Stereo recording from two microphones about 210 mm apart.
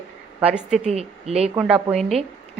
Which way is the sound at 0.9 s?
30° right (ahead or behind).